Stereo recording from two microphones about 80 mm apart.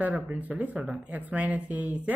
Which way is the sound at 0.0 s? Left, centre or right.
Centre.